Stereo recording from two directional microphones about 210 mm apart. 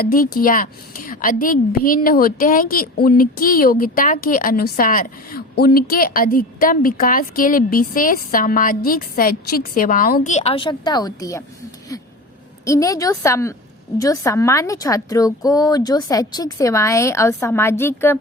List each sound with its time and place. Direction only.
0.0 s a woman's voice: 45° left (ahead or behind); by 11.4 s 15° left (ahead or behind)
12.6 s a woman's voice: 15° left (ahead or behind)